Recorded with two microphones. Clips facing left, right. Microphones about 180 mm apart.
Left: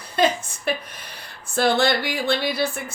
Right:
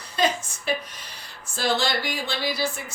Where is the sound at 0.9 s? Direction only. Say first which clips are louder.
Left 3 dB; 55° left (ahead or behind).